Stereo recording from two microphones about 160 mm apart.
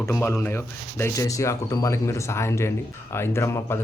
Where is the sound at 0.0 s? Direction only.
15° left (ahead or behind).